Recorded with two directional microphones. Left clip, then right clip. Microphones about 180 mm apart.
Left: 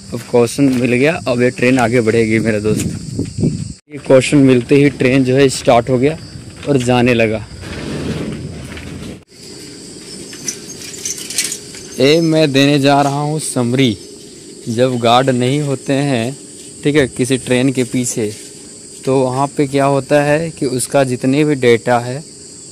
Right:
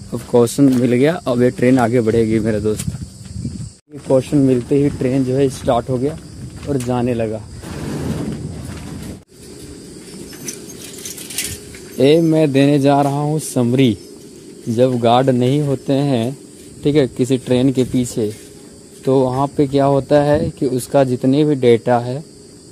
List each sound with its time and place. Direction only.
0.1 s speech: 15° right (ahead or behind)
4.1 s speech: 20° left (ahead or behind)
12.0 s speech: 15° right (ahead or behind)